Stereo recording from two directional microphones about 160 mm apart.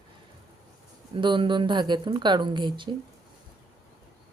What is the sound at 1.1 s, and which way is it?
Speech, 30° right (ahead or behind).